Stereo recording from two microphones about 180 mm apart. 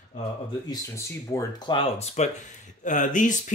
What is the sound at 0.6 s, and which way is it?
Speech, 20° left (ahead or behind).